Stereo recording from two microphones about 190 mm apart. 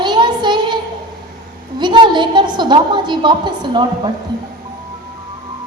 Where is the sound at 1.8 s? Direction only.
25° right (ahead or behind).